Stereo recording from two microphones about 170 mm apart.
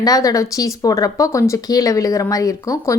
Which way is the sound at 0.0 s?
20° left (ahead or behind).